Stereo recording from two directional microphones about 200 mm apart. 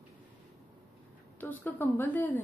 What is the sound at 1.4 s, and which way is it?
Speech, 10° left (ahead or behind).